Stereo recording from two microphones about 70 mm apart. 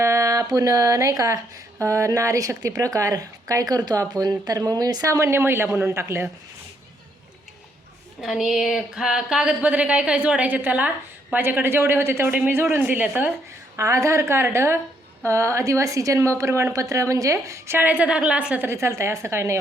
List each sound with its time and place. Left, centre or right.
0.0 s a sound: right
1.8 s speech: right
5.0 s a woman's voice: right
8.2 s speech: centre; by 12.3 s right
12.7 s speech: right
13.7 s a woman's voice: right
17.7 s speech: right
18.7 s a woman's voice: right